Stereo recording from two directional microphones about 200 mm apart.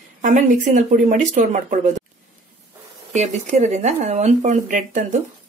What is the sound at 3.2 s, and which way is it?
Speech, 35° right (ahead or behind).